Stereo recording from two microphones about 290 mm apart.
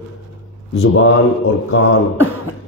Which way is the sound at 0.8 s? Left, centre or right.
Left.